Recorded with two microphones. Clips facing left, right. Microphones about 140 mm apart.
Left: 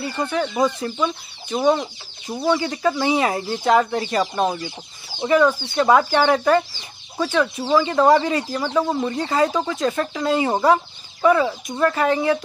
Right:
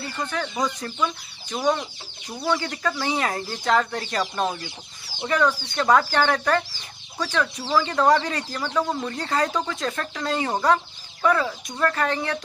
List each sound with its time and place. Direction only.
0.3 s speech: 15° left (ahead or behind)
7.5 s speech: 25° left (ahead or behind)
7.8 s speech: 10° left (ahead or behind)